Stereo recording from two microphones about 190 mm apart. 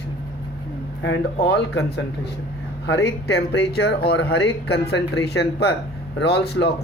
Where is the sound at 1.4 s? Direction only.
65° left (ahead or behind).